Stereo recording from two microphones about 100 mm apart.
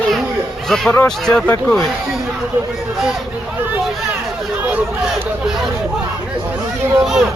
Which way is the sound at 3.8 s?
Centre (ahead or behind).